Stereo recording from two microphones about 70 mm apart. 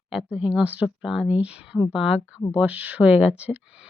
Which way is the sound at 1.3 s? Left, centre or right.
Centre.